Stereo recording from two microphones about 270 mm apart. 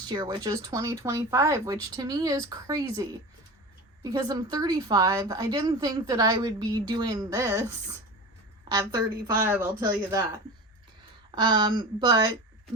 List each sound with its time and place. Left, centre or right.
0.1 s a woman's voice: centre
8.7 s a woman's voice: centre